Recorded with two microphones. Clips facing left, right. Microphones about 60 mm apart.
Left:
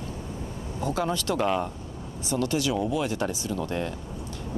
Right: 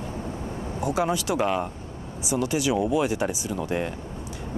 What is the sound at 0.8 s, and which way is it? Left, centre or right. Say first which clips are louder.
Speech: right 3 dB; centre.